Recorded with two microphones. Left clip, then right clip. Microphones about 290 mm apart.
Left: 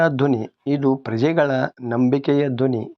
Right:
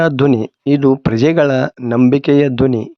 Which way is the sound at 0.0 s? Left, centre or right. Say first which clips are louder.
Right 5 dB; right.